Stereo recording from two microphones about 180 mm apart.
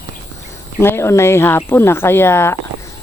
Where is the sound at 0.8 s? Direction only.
15° left (ahead or behind).